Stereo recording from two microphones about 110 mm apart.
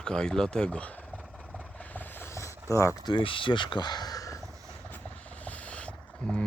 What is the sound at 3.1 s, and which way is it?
Speech, 50° left (ahead or behind).